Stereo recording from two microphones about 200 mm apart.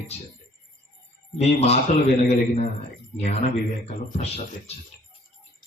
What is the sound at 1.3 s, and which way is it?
Speech, 30° left (ahead or behind).